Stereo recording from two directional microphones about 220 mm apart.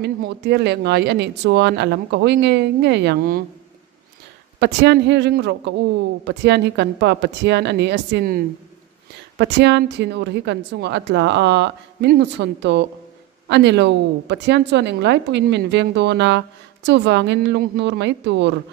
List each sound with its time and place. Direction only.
0.0 s a woman's voice: 50° right (ahead or behind)
4.6 s a woman's voice: 50° right (ahead or behind)
9.4 s a woman's voice: 50° right (ahead or behind)